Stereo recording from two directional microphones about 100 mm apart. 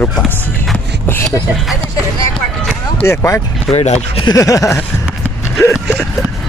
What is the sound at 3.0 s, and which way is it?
Speech, 25° left (ahead or behind).